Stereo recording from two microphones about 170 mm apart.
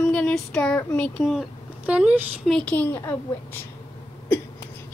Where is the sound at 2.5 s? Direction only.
10° left (ahead or behind).